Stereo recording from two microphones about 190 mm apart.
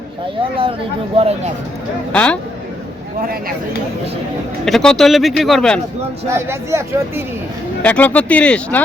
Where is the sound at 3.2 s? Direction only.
50° right (ahead or behind).